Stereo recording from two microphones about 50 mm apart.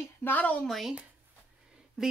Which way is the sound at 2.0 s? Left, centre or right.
Centre.